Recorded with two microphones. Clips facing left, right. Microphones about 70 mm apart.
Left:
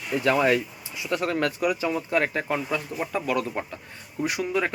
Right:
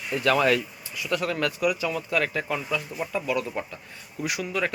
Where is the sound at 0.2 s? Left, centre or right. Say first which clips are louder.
Even; left.